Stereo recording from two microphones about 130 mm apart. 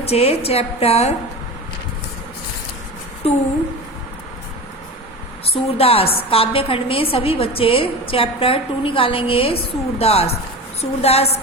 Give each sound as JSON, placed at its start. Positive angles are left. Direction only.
{"t": 0.0, "sound": "a woman's voice", "side_deg": 50}
{"t": 3.2, "sound": "a woman's voice", "side_deg": 50}
{"t": 5.5, "sound": "a woman's voice", "side_deg": 50}